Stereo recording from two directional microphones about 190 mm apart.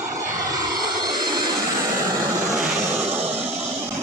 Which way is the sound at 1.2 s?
20° right (ahead or behind).